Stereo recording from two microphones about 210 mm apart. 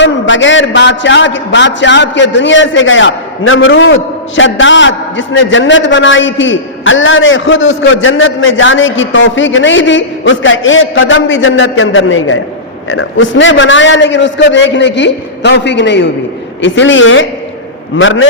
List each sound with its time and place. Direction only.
0.0 s a man's voice: 60° left (ahead or behind)